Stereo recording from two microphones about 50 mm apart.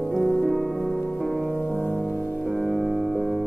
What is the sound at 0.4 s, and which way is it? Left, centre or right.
Music, centre.